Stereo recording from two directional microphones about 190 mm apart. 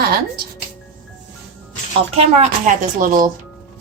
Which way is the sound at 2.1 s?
40° right (ahead or behind).